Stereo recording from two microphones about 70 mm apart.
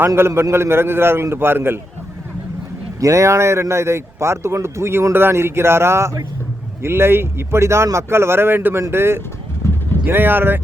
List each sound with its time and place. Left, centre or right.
0.2 s speech: right
3.0 s speech: right